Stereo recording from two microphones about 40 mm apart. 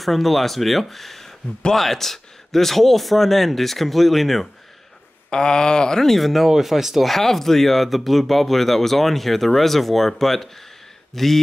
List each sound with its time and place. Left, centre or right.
0.0 s speech: centre
5.3 s speech: centre
6.0 s speech: centre
7.1 s speech: centre